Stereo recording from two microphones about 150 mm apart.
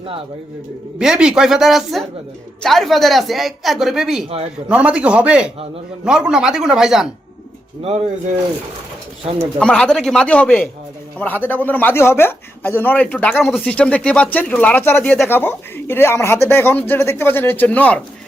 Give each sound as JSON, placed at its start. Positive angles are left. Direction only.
{"t": 0.9, "sound": "a man's voice", "side_deg": -5}
{"t": 7.8, "sound": "speech", "side_deg": -40}
{"t": 9.6, "sound": "speech", "side_deg": 5}